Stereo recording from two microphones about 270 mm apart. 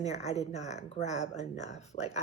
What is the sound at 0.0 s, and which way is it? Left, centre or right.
A woman's voice, left.